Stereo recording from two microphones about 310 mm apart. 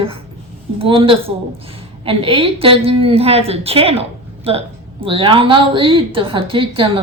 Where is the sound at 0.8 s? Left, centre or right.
Centre.